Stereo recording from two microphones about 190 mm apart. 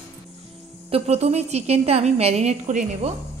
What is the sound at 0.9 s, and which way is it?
A woman's voice, 35° right (ahead or behind).